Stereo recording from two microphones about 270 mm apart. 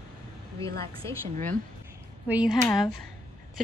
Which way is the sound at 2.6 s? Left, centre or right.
Centre.